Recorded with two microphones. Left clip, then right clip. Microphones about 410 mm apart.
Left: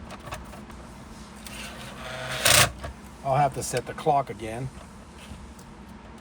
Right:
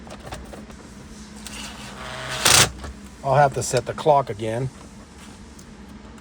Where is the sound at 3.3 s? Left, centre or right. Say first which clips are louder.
Right 6 dB; right.